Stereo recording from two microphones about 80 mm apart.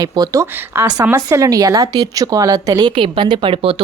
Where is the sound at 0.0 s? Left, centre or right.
Right.